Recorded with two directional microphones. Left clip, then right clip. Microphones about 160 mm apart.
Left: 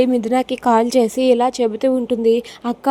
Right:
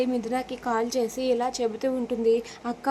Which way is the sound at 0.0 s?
45° left (ahead or behind).